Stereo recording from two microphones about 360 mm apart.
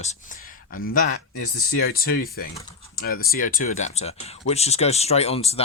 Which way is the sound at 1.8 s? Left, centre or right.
Left.